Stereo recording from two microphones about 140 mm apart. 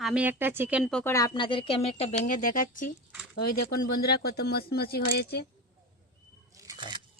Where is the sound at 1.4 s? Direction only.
40° left (ahead or behind); by 2.9 s 75° left (ahead or behind).